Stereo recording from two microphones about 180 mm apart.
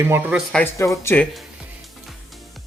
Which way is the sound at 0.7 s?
15° left (ahead or behind).